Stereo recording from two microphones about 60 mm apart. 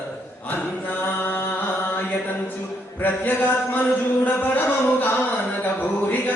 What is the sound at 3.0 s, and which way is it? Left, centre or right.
Speech, left.